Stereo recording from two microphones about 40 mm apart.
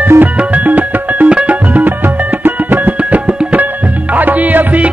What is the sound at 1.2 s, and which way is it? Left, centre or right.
Music, right.